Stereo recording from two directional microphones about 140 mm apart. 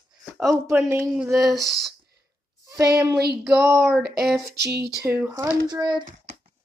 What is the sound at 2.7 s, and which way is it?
Speech, 20° right (ahead or behind).